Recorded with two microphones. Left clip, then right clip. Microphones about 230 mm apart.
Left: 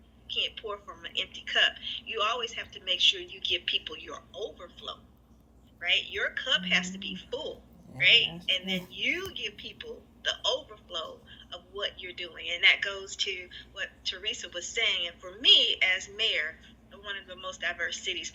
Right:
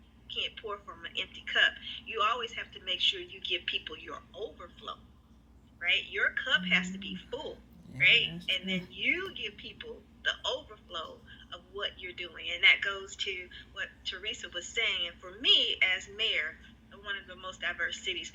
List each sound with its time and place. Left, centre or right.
0.3 s a woman's voice: centre